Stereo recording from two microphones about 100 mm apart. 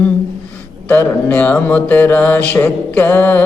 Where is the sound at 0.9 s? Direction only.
15° left (ahead or behind).